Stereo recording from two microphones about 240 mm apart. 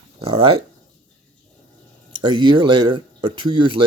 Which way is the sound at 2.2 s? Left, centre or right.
Centre.